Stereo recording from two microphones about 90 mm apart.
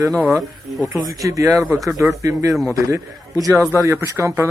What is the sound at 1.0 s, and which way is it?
Speech, 40° right (ahead or behind).